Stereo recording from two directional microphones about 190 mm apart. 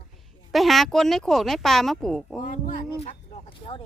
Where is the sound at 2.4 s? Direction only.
40° left (ahead or behind).